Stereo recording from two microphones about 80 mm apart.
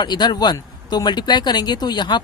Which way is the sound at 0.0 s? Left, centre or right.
Left.